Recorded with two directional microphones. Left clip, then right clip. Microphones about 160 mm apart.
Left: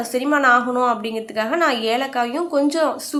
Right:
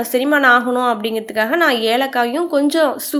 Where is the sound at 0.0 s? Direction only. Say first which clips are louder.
Right 4 dB; 25° right (ahead or behind).